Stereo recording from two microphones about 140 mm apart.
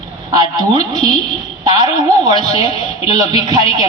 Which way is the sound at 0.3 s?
30° right (ahead or behind).